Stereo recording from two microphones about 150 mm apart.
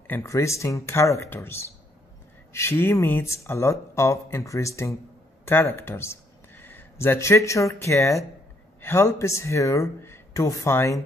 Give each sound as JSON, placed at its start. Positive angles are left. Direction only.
{"t": 0.0, "sound": "speech", "side_deg": 15}